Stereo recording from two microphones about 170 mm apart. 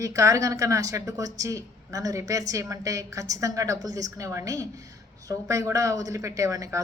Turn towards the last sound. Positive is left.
turn(degrees=-20)  # may be behind; listen again after turning